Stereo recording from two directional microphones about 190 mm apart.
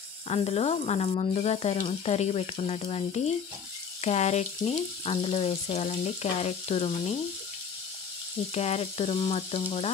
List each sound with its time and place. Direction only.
0.3 s speech: 35° left (ahead or behind)
8.5 s speech: 35° left (ahead or behind)